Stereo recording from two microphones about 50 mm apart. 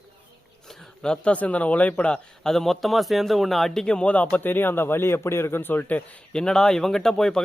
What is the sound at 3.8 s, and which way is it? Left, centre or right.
A man's voice, left.